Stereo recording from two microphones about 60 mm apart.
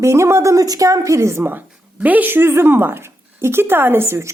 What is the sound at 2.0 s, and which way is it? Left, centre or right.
A woman's voice, right.